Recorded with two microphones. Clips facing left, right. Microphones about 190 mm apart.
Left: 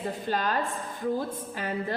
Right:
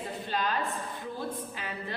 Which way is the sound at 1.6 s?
45° left (ahead or behind).